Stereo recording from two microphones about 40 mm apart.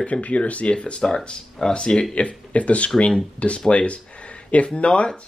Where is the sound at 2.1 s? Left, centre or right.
Left.